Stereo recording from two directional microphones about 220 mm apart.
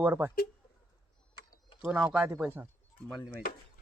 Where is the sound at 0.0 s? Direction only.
10° right (ahead or behind).